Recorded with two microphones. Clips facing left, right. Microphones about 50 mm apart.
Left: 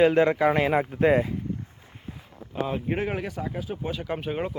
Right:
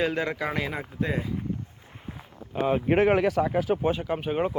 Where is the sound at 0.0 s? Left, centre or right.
Left.